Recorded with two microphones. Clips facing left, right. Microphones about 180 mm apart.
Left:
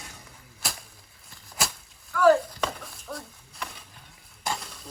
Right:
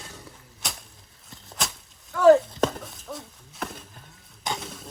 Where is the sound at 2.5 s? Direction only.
45° right (ahead or behind).